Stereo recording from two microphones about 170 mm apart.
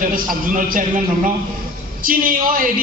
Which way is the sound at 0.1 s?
55° right (ahead or behind).